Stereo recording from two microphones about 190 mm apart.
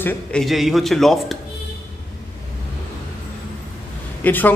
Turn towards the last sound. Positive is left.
turn(degrees=10)  # may be behind; listen again after turning